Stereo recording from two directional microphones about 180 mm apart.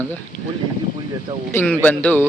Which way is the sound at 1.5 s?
10° left (ahead or behind).